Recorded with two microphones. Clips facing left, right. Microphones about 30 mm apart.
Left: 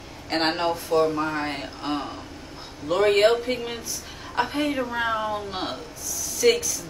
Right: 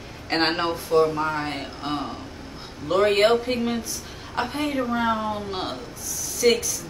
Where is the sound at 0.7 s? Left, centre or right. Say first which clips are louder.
Right 1 dB; centre.